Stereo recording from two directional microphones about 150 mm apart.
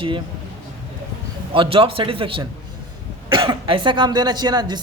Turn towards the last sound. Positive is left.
turn(degrees=-30)  # may be behind; listen again after turning